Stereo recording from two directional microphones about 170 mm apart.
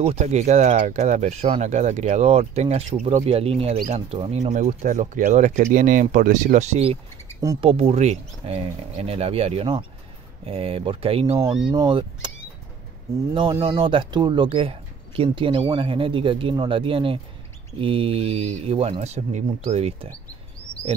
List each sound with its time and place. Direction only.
0.0 s speech: 40° right (ahead or behind)
13.3 s speech: 30° right (ahead or behind)